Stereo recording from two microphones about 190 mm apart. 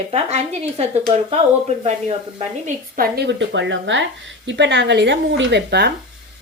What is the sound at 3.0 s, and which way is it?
A woman's voice, 60° right (ahead or behind).